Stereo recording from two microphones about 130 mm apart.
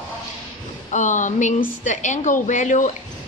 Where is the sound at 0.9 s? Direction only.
70° left (ahead or behind).